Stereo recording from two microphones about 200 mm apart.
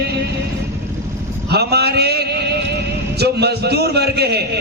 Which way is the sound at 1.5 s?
55° right (ahead or behind).